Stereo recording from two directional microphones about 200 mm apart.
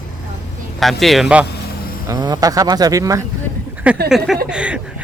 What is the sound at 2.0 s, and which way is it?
A man's voice, 20° right (ahead or behind).